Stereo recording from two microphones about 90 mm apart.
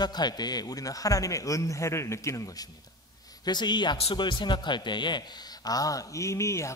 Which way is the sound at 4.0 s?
75° left (ahead or behind).